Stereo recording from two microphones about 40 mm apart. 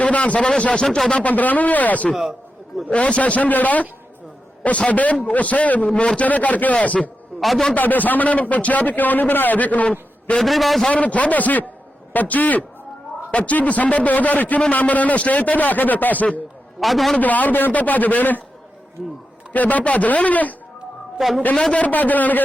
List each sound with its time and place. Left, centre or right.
0.0 s a man's voice: left
0.9 s speech: centre
1.2 s a man's voice: left
4.9 s a man's voice: left
7.3 s a man's voice: centre
7.8 s a man's voice: left
10.4 s a man's voice: centre
10.8 s a man's voice: left
16.8 s a man's voice: centre
17.2 s a man's voice: left
19.5 s a man's voice: left
21.2 s a man's voice: centre
21.7 s a man's voice: left
21.9 s a man's voice: left